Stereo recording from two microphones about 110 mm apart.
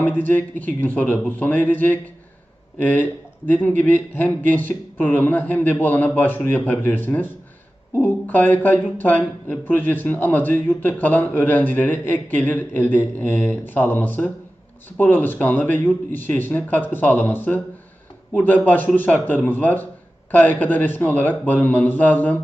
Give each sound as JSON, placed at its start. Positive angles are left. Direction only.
{"t": 0.0, "sound": "speech", "side_deg": 15}